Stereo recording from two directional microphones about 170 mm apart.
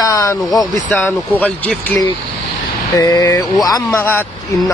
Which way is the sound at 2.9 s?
20° left (ahead or behind).